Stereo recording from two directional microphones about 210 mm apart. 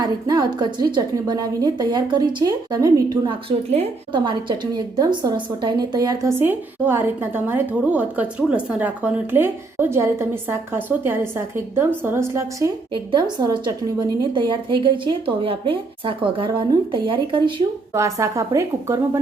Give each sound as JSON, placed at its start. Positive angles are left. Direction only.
{"t": 0.0, "sound": "a woman's voice", "side_deg": -20}